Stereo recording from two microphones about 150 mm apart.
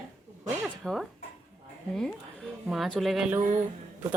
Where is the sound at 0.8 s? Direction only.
Centre (ahead or behind).